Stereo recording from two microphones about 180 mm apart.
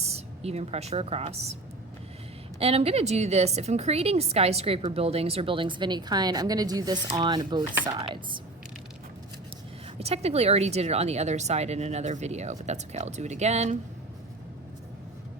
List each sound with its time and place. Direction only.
0.0 s speech: 35° right (ahead or behind)
2.6 s a woman's voice: 35° right (ahead or behind)
10.0 s a woman's voice: 35° right (ahead or behind)